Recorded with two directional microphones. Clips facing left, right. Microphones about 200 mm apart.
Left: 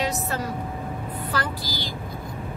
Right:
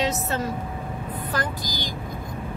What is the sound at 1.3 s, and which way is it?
Speech, 15° right (ahead or behind).